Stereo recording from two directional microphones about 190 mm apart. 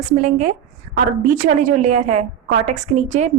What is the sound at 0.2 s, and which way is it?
A woman's voice, 40° right (ahead or behind).